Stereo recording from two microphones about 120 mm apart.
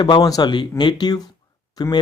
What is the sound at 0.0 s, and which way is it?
Speech, 35° left (ahead or behind).